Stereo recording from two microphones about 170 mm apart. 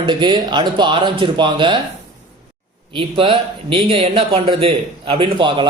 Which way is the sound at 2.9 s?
30° right (ahead or behind).